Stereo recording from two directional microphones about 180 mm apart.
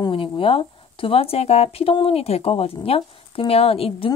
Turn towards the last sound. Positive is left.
turn(degrees=30)  # may be behind; listen again after turning